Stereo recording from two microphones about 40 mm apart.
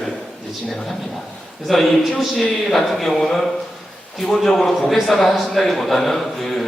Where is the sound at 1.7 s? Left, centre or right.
Centre.